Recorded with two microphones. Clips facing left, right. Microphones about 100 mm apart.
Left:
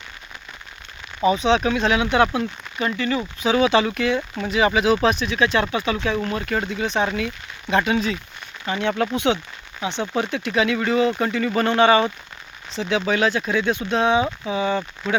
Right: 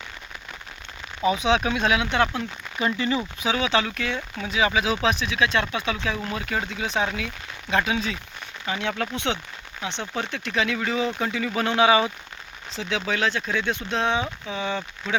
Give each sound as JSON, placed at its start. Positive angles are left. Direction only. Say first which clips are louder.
{"t": 1.4, "sound": "speech", "louder": "left 3 dB", "side_deg": -10}
{"t": 2.0, "sound": "speech", "louder": "left 5 dB", "side_deg": 5}
{"t": 2.8, "sound": "speech", "louder": "left 1 dB", "side_deg": -15}
{"t": 3.2, "sound": "speech", "louder": "left 5 dB", "side_deg": -5}
{"t": 3.6, "sound": "speech", "louder": "left 7 dB", "side_deg": 10}